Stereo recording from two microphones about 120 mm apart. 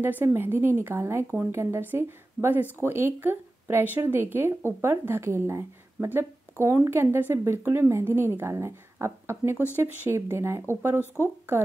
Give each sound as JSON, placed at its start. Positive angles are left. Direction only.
{"t": 0.2, "sound": "a woman's voice", "side_deg": -20}